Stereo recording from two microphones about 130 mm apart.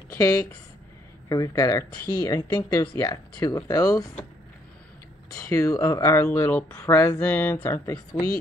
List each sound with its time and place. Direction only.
0.1 s a woman's voice: 25° left (ahead or behind)
5.5 s speech: 25° left (ahead or behind)
7.9 s speech: 30° left (ahead or behind)